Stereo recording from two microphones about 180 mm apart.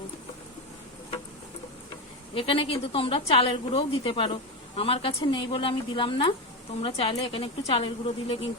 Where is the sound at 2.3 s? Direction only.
30° left (ahead or behind).